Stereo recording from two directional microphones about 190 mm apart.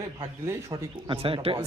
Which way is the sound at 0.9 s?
25° right (ahead or behind).